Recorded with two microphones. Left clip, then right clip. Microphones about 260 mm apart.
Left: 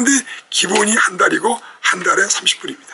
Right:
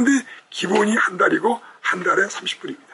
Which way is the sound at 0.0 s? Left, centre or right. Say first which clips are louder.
Left 3 dB; centre.